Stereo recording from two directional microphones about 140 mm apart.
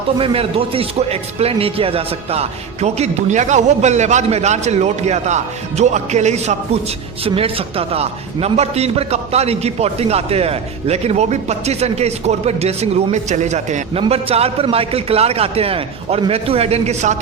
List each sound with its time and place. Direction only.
0.2 s a man's voice: 40° right (ahead or behind)
7.3 s a man's voice: 40° right (ahead or behind)